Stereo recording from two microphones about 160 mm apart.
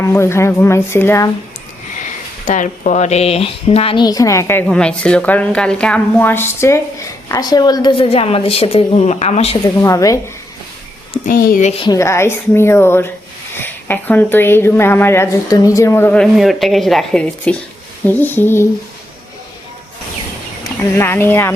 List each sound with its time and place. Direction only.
0.0 s a woman's voice: 15° left (ahead or behind)
2.5 s a woman's voice: 50° left (ahead or behind); by 4.6 s 15° left (ahead or behind)
4.6 s a woman's voice: 5° left (ahead or behind); by 9.6 s 40° left (ahead or behind)
9.8 s speech: 20° left (ahead or behind)
11.3 s speech: 65° left (ahead or behind)
11.6 s a woman's voice: 40° left (ahead or behind)
11.9 s a woman's voice: 20° left (ahead or behind)
16.2 s a woman's voice: centre (ahead or behind)
20.9 s a woman's voice: 15° left (ahead or behind)